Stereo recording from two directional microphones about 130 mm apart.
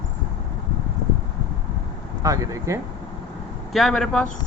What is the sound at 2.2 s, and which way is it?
Speech, 25° right (ahead or behind).